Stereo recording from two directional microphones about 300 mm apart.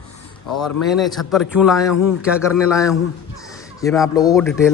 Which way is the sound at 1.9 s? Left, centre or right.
Left.